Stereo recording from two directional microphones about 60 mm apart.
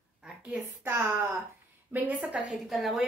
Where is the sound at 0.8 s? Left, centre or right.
Right.